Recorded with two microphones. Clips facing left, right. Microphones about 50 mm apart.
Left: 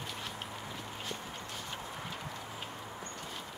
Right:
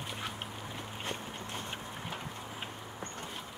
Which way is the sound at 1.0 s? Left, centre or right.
Right.